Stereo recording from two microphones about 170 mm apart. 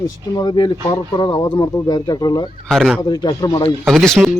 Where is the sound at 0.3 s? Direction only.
25° left (ahead or behind).